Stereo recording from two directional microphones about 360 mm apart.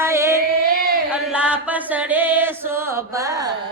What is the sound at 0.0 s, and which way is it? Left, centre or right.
Music, centre.